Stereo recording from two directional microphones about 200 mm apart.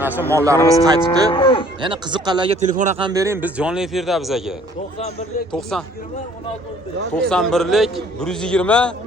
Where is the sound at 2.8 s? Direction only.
35° right (ahead or behind).